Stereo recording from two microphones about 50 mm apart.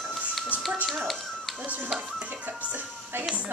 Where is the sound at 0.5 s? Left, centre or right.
Right.